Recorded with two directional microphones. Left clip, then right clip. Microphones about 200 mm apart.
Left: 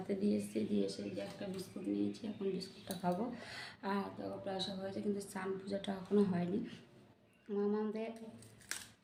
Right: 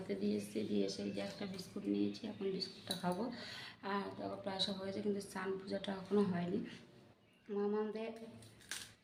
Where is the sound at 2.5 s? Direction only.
5° left (ahead or behind).